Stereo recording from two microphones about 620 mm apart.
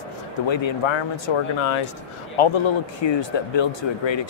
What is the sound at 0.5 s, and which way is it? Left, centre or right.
Speech, left.